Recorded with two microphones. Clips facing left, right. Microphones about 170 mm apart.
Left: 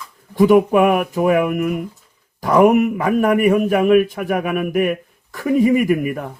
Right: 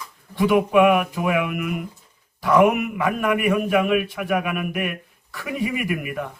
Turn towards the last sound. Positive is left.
turn(degrees=40)  # may be behind; listen again after turning